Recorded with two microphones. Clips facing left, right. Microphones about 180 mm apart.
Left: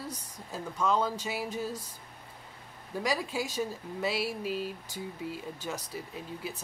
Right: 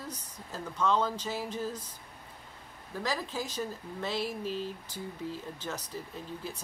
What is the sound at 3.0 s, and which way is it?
Speech, 10° left (ahead or behind).